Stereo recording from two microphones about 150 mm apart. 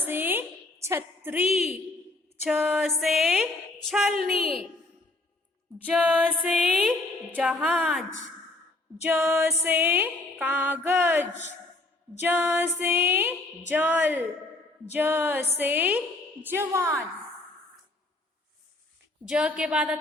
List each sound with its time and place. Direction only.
0.0 s a sound: 15° right (ahead or behind)
2.4 s a woman's voice: 5° right (ahead or behind)
6.0 s music: 10° right (ahead or behind)
6.5 s a woman's voice: 5° left (ahead or behind)
7.3 s a woman's voice: 10° right (ahead or behind)
9.0 s music: 10° right (ahead or behind)
19.3 s music: 5° right (ahead or behind)